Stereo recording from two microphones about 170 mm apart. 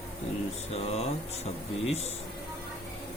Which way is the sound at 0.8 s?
35° left (ahead or behind).